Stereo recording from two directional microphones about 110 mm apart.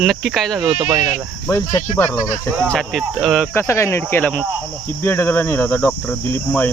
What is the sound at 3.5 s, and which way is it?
Speech, 25° left (ahead or behind).